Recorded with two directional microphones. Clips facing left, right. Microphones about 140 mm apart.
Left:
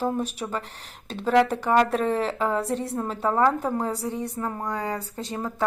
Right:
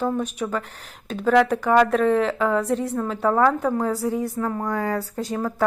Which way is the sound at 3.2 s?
20° left (ahead or behind).